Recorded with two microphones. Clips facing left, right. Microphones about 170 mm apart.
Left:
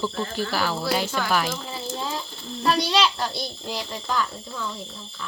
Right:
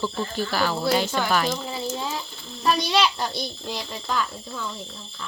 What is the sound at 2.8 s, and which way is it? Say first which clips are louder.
Speech: even; 10° right (ahead or behind).